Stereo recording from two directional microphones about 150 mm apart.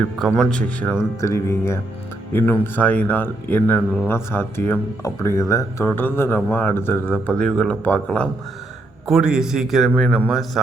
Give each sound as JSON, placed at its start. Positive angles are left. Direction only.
{"t": 0.2, "sound": "a man's voice", "side_deg": 0}
{"t": 0.8, "sound": "speech", "side_deg": 15}
{"t": 9.0, "sound": "a man's voice", "side_deg": -5}